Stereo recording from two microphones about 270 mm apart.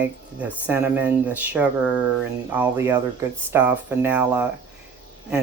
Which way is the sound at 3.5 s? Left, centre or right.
Centre.